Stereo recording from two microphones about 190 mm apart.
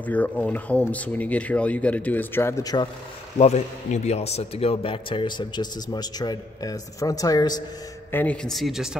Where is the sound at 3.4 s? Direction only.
35° left (ahead or behind); by 7.6 s 20° left (ahead or behind).